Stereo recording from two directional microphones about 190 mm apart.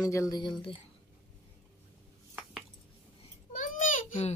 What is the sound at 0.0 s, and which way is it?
Speech, 20° left (ahead or behind).